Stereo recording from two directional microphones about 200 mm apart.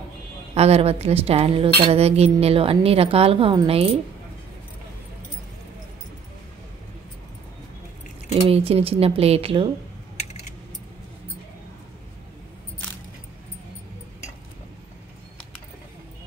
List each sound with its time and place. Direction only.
0.6 s speech: 30° right (ahead or behind)
8.5 s speech: 30° right (ahead or behind)